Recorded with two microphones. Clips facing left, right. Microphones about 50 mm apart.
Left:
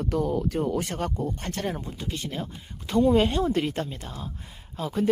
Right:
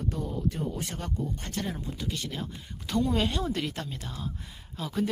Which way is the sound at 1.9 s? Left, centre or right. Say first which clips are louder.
Left 2 dB; left.